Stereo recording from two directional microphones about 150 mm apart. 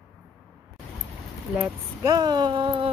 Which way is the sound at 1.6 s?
25° right (ahead or behind).